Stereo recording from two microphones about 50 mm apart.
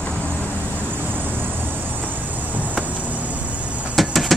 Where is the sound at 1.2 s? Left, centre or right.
Right.